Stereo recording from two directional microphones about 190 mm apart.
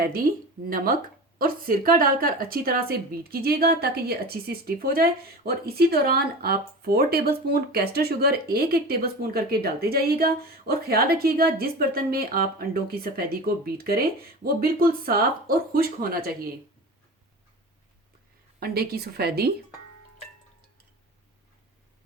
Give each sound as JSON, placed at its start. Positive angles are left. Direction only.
{"t": 0.6, "sound": "speech", "side_deg": -50}
{"t": 18.6, "sound": "a woman's voice", "side_deg": -55}